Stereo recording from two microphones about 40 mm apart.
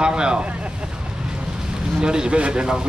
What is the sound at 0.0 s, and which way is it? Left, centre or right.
Speech, right.